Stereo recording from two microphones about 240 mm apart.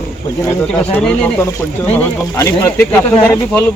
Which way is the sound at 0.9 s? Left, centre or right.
Centre.